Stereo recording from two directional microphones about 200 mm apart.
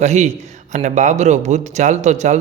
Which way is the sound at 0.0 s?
35° right (ahead or behind).